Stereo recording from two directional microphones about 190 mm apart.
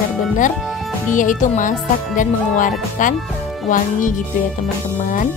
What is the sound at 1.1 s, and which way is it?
Speech, 45° left (ahead or behind).